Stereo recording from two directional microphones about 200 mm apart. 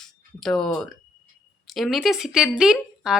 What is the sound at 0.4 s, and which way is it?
Speech, centre (ahead or behind).